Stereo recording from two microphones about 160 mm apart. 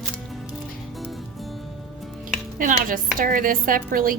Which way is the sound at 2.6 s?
55° right (ahead or behind).